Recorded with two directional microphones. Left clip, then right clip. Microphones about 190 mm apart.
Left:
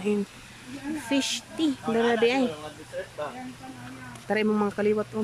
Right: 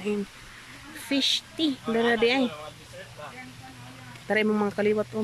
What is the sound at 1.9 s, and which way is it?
Speech, 55° left (ahead or behind).